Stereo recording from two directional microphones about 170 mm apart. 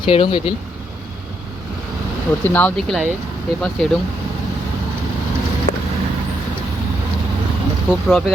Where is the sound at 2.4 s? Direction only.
10° left (ahead or behind).